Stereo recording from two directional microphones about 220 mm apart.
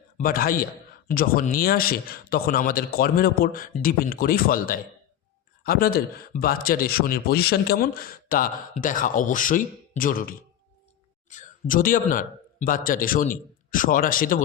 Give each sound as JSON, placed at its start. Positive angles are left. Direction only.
{"t": 0.2, "sound": "a man's voice", "side_deg": 40}